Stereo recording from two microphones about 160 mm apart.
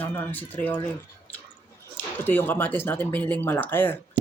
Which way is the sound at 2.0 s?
10° left (ahead or behind).